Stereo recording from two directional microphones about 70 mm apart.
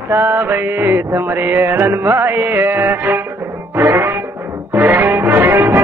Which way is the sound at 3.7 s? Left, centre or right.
Right.